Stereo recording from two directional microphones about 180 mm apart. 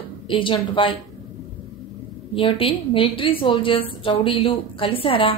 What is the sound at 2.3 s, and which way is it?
A woman's voice, 30° left (ahead or behind).